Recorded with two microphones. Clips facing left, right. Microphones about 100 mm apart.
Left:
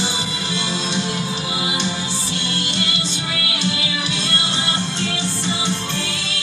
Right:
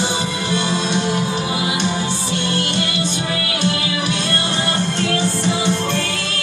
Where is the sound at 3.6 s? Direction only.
50° right (ahead or behind).